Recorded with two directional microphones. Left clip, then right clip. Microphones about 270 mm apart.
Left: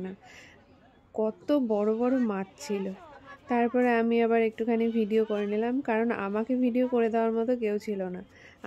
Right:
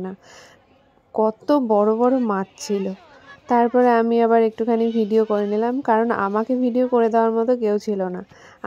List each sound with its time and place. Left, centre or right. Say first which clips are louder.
1.1 s speech: right 9 dB; centre